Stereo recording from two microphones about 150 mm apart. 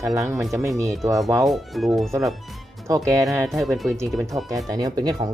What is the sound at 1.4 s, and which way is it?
Speech, centre (ahead or behind).